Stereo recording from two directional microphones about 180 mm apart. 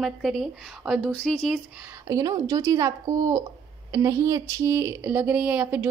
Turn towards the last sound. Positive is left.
turn(degrees=-10)  # may be behind; listen again after turning